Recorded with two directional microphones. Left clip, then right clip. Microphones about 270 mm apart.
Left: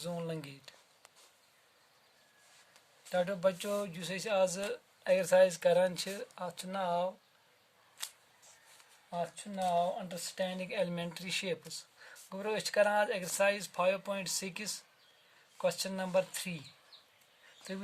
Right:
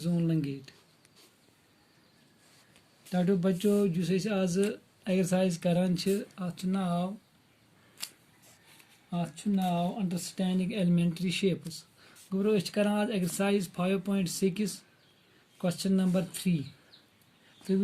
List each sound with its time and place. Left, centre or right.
0.0 s a sound: left
3.1 s speech: left
9.6 s speech: left